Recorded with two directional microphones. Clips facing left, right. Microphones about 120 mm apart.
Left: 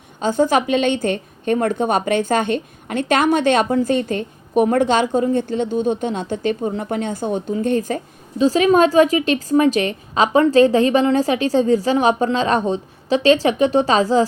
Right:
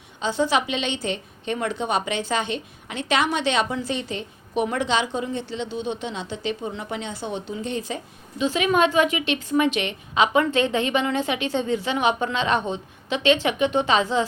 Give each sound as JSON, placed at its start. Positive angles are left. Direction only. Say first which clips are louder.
{"t": 0.2, "sound": "a woman's voice", "louder": "left 6 dB", "side_deg": 45}